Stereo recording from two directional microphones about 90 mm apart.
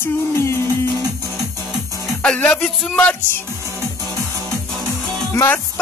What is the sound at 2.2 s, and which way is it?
Music, 15° left (ahead or behind).